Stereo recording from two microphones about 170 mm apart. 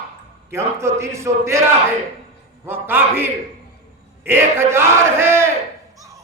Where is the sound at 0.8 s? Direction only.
15° right (ahead or behind).